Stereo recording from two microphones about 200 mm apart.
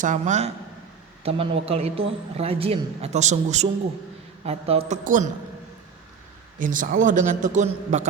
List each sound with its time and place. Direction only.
0.0 s a man's voice: 35° right (ahead or behind)
6.6 s a man's voice: 40° right (ahead or behind)